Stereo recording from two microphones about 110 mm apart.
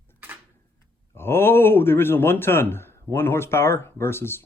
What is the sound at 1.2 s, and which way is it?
Speech, 20° left (ahead or behind).